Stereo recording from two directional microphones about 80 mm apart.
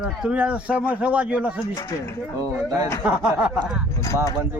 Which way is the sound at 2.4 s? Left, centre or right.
Right.